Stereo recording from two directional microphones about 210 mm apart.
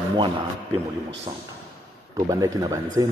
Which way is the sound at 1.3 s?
20° right (ahead or behind).